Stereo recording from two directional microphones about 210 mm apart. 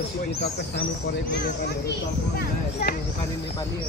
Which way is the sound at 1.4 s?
50° left (ahead or behind).